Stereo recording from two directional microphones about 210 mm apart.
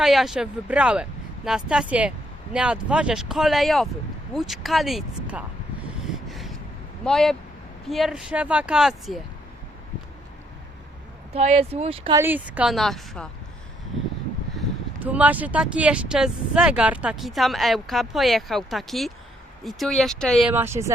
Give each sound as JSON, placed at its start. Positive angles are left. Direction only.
{"t": 0.0, "sound": "speech", "side_deg": 0}
{"t": 6.2, "sound": "a sound", "side_deg": 0}
{"t": 7.0, "sound": "speech", "side_deg": 0}
{"t": 11.3, "sound": "speech", "side_deg": -30}
{"t": 12.1, "sound": "speech", "side_deg": -10}
{"t": 15.0, "sound": "speech", "side_deg": -5}
{"t": 20.5, "sound": "speech", "side_deg": -10}